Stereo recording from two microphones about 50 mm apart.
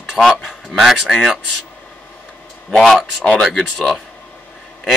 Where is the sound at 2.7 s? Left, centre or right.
Centre.